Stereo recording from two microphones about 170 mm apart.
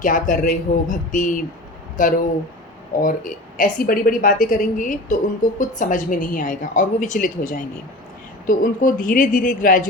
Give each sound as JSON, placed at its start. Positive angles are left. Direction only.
{"t": 0.0, "sound": "a woman's voice", "side_deg": 50}